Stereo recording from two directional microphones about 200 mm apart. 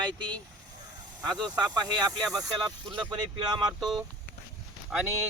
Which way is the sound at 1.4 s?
20° right (ahead or behind).